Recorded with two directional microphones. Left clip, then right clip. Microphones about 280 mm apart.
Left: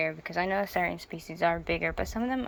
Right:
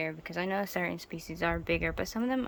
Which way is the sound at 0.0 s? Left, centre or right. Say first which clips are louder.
Left 5 dB; centre.